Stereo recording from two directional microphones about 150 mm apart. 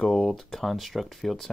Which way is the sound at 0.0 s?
Centre (ahead or behind).